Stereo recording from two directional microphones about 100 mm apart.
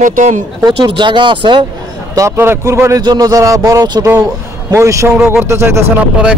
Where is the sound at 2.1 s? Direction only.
30° right (ahead or behind).